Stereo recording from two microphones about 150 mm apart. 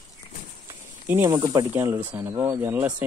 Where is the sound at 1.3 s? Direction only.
25° right (ahead or behind).